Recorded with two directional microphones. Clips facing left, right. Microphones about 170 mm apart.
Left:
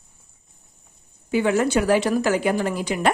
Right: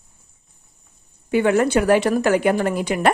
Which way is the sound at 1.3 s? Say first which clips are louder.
Right 3 dB; 60° right (ahead or behind).